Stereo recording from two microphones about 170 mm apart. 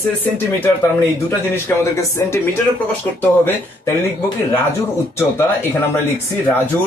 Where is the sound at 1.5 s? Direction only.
15° left (ahead or behind).